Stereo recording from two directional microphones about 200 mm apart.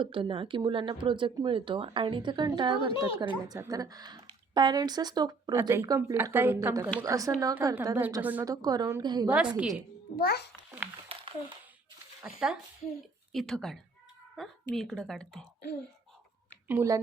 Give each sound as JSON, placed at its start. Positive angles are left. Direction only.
{"t": 0.0, "sound": "speech", "side_deg": -25}
{"t": 9.6, "sound": "a woman's voice", "side_deg": -5}
{"t": 10.2, "sound": "a child's voice", "side_deg": 50}
{"t": 11.1, "sound": "a sound", "side_deg": -25}
{"t": 12.2, "sound": "a woman's voice", "side_deg": -5}
{"t": 16.6, "sound": "speech", "side_deg": -15}